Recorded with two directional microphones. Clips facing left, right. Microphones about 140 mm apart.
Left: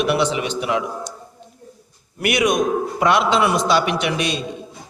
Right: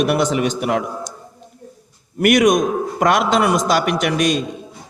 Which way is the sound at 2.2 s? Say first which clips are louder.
Right 5 dB; 45° right (ahead or behind).